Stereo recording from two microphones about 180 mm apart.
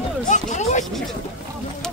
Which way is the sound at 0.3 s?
40° left (ahead or behind).